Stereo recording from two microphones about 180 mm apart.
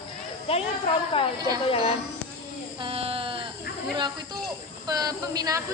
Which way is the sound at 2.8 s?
30° right (ahead or behind).